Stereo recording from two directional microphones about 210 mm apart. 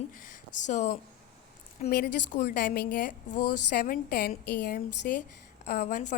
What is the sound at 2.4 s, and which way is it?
A woman's voice, 45° left (ahead or behind).